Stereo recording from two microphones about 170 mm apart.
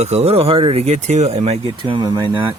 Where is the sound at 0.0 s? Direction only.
40° right (ahead or behind).